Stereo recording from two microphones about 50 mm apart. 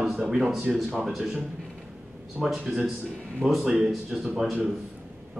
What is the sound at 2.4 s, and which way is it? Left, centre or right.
Speech, centre.